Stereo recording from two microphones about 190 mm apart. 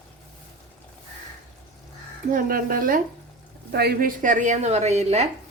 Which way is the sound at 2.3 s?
50° right (ahead or behind).